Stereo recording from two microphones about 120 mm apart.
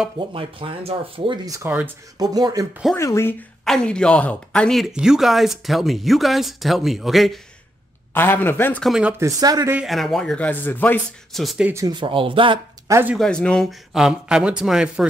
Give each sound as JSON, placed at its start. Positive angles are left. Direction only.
{"t": 0.3, "sound": "speech", "side_deg": -50}
{"t": 1.4, "sound": "speech", "side_deg": -30}
{"t": 3.0, "sound": "speech", "side_deg": 25}
{"t": 3.6, "sound": "speech", "side_deg": 5}
{"t": 8.1, "sound": "speech", "side_deg": 15}
{"t": 8.8, "sound": "speech", "side_deg": -5}
{"t": 9.2, "sound": "speech", "side_deg": -30}
{"t": 9.8, "sound": "speech", "side_deg": 0}
{"t": 11.3, "sound": "speech", "side_deg": 0}
{"t": 11.7, "sound": "speech", "side_deg": -35}
{"t": 13.2, "sound": "speech", "side_deg": 5}